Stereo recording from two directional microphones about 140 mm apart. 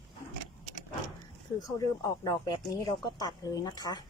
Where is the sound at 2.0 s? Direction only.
25° left (ahead or behind).